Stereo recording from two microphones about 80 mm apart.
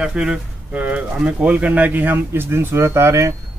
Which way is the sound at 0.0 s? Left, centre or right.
Centre.